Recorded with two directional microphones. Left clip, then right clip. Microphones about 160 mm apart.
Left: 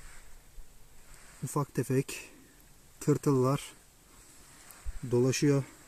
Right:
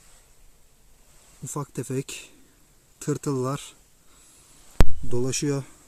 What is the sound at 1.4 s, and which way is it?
Speech, 5° left (ahead or behind).